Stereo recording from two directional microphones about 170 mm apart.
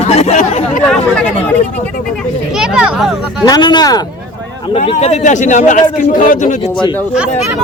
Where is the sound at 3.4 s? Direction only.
25° left (ahead or behind).